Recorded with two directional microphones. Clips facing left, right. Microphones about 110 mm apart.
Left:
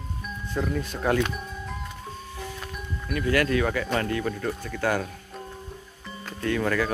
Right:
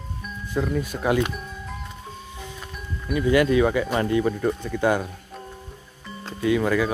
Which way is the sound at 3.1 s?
15° right (ahead or behind).